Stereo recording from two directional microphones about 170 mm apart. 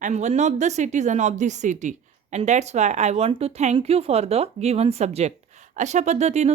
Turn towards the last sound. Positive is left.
turn(degrees=-40)  # may be behind; listen again after turning